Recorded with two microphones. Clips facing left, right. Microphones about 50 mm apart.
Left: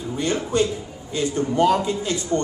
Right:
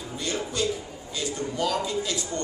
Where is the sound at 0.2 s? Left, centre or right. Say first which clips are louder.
Left 7 dB; left.